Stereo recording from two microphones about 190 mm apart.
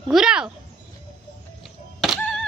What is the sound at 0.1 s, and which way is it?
Speech, 5° right (ahead or behind).